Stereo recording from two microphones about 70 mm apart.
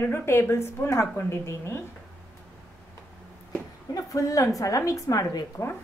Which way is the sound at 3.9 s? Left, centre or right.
Left.